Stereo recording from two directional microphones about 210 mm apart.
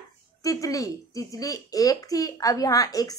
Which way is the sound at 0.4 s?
15° left (ahead or behind).